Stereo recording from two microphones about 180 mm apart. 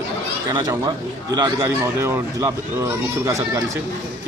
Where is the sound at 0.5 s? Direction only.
20° right (ahead or behind).